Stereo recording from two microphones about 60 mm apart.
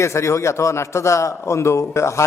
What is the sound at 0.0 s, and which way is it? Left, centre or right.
A man's voice, left.